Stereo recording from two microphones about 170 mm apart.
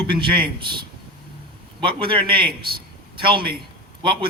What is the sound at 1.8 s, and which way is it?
A man's voice, 30° right (ahead or behind).